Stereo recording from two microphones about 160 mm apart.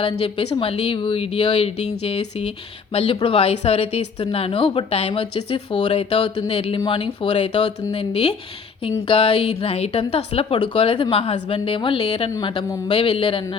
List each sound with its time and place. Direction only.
0.0 s speech: 35° left (ahead or behind)